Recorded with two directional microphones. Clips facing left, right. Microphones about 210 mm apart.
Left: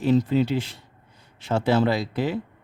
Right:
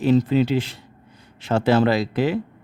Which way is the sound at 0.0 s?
90° right.